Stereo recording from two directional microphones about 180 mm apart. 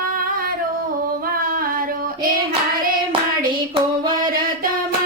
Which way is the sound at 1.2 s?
55° right (ahead or behind).